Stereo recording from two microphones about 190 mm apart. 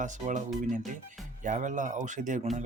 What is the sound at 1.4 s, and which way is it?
Speech, 40° right (ahead or behind).